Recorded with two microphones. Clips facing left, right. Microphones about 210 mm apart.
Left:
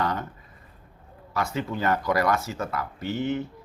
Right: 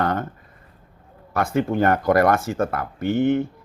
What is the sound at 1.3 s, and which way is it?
Speech, 50° right (ahead or behind).